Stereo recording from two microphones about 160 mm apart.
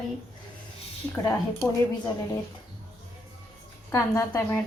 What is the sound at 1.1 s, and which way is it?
Speech, 20° left (ahead or behind).